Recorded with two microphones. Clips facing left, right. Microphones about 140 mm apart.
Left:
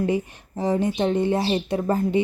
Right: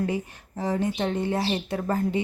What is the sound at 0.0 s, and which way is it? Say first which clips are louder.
A woman's voice: left 4 dB; 20° left (ahead or behind).